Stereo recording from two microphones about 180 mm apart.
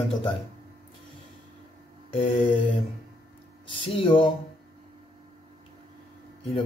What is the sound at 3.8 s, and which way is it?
Speech, 30° left (ahead or behind).